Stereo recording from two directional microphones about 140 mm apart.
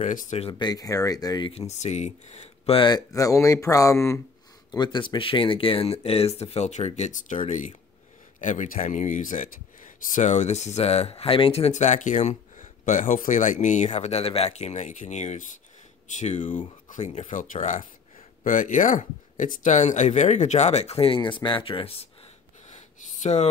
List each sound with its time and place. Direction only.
0.0 s speech: 65° left (ahead or behind)
0.4 s speech: 35° left (ahead or behind)
1.5 s speech: 50° left (ahead or behind)
2.9 s speech: 25° left (ahead or behind)
4.6 s speech: 30° left (ahead or behind)
22.7 s a sound: 60° left (ahead or behind)